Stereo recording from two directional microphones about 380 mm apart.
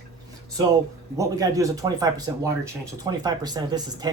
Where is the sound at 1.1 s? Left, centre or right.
Centre.